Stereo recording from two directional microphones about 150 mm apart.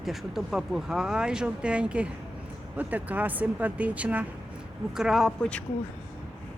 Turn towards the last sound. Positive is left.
turn(degrees=5)  # may be behind; listen again after turning